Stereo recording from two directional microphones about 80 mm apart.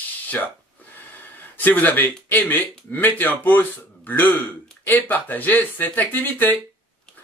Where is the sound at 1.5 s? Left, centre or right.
Left.